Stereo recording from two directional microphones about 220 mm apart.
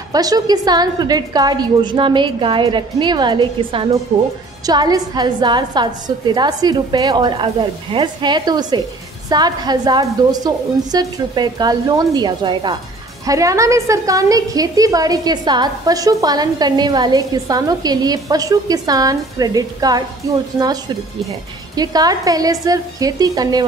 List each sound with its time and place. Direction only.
0.1 s a woman's voice: 15° right (ahead or behind)